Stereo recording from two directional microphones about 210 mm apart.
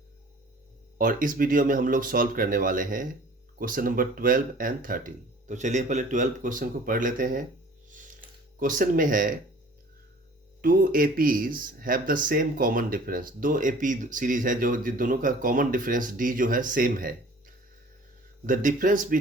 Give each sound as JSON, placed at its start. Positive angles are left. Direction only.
{"t": 0.9, "sound": "speech", "side_deg": -40}
{"t": 7.9, "sound": "a sound", "side_deg": -40}
{"t": 10.6, "sound": "speech", "side_deg": -40}